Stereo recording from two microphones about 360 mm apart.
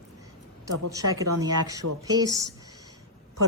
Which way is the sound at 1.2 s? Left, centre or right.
Centre.